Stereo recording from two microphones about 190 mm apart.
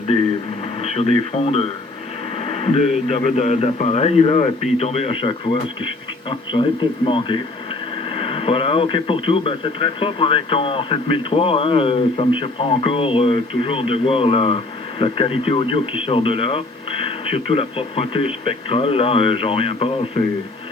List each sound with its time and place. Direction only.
2.5 s a man's voice: 30° left (ahead or behind)